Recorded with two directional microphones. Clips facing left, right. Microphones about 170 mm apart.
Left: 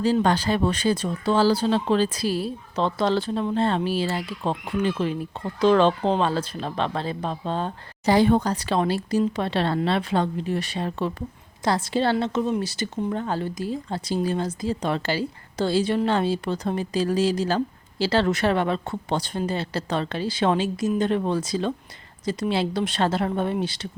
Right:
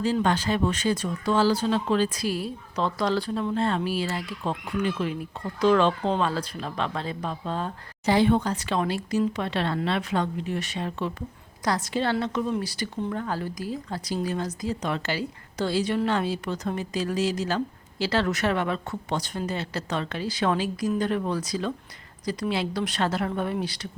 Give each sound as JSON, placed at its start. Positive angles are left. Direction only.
{"t": 0.0, "sound": "speech", "side_deg": 35}
{"t": 8.0, "sound": "speech", "side_deg": 40}